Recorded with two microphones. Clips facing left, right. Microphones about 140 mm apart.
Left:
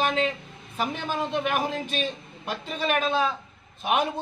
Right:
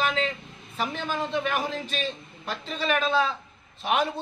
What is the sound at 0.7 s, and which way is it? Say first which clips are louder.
Speech: left 1 dB; 15° left (ahead or behind).